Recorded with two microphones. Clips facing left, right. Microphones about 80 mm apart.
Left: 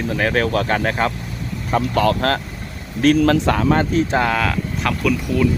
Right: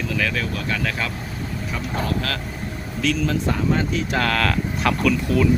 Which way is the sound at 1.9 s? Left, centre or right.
Left.